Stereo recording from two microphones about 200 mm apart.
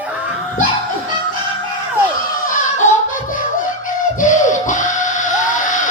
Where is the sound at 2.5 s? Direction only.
35° left (ahead or behind).